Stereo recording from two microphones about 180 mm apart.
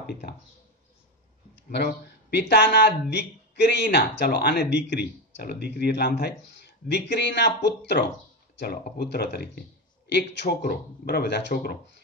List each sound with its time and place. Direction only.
1.5 s speech: 65° left (ahead or behind)